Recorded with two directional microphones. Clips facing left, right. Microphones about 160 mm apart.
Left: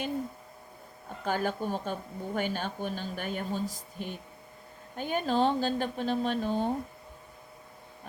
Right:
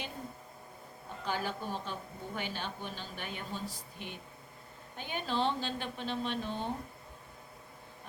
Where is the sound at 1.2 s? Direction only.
50° left (ahead or behind).